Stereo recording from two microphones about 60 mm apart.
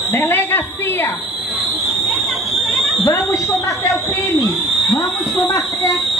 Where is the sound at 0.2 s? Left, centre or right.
Left.